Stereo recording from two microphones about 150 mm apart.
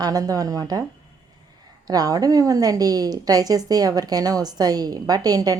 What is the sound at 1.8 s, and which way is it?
A woman's voice, 25° right (ahead or behind).